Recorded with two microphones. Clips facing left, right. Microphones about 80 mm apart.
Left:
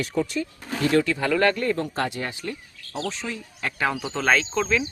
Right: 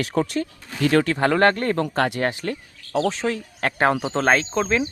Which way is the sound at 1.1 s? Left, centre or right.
Right.